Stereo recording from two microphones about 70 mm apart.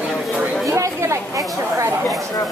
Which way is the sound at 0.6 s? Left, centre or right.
Right.